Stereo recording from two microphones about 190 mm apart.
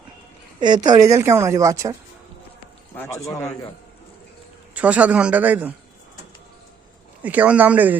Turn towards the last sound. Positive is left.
turn(degrees=-10)  # may be behind; listen again after turning